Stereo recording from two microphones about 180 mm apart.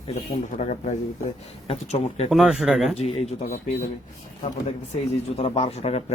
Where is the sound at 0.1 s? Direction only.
40° left (ahead or behind).